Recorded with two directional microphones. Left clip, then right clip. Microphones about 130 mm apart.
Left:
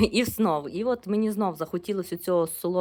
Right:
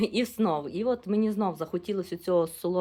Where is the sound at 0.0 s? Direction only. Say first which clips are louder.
Left 3 dB; 40° left (ahead or behind).